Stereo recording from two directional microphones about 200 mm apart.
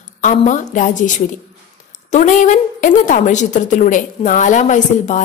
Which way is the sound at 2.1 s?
40° left (ahead or behind).